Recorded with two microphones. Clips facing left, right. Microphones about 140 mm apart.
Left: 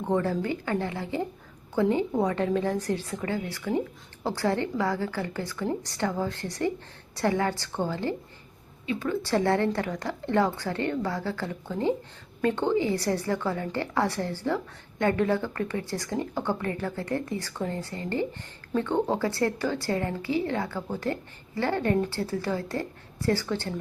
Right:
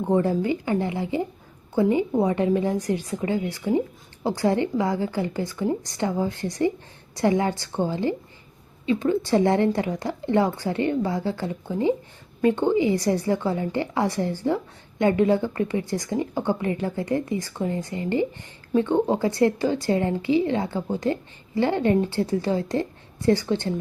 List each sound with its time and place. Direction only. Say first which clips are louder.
0.0 s a woman's voice: right 5 dB; 15° right (ahead or behind)